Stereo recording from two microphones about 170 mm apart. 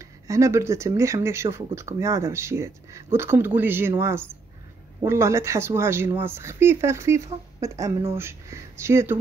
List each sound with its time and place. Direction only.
0.0 s speech: 15° right (ahead or behind)